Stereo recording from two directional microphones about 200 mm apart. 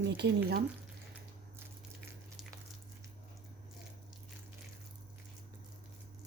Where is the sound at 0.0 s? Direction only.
60° right (ahead or behind).